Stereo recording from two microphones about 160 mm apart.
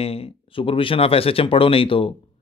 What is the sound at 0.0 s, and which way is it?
Speech, 35° left (ahead or behind).